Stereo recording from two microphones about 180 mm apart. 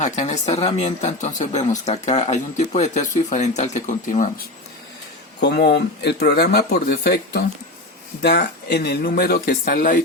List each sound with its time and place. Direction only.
0.0 s speech: 40° left (ahead or behind)
5.4 s speech: 70° left (ahead or behind); by 10.0 s 50° left (ahead or behind)